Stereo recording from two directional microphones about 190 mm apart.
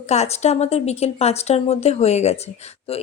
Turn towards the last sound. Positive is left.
turn(degrees=35)  # may be behind; listen again after turning